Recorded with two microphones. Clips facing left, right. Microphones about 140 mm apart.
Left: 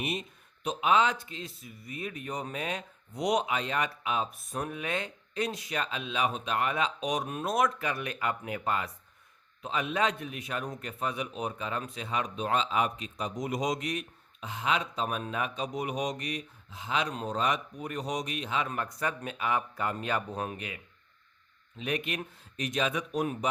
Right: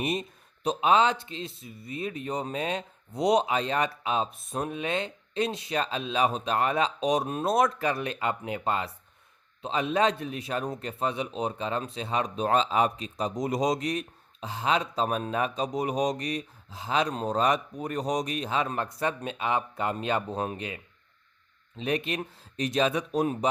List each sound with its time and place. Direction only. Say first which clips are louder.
0.0 s a man's voice: right 5 dB; 40° right (ahead or behind)